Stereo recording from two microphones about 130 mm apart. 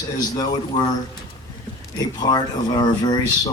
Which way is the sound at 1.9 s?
30° left (ahead or behind).